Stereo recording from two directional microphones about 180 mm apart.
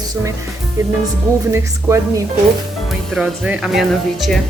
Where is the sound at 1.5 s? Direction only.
15° right (ahead or behind).